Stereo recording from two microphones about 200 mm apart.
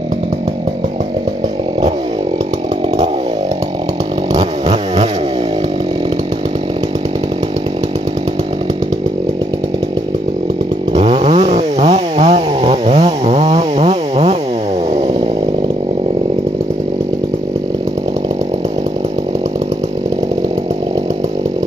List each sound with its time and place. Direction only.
4.3 s chainsaw: 25° right (ahead or behind)
10.9 s chainsaw: 25° right (ahead or behind)